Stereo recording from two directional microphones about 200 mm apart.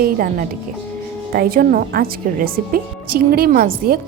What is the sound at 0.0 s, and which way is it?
A woman's voice, 45° right (ahead or behind).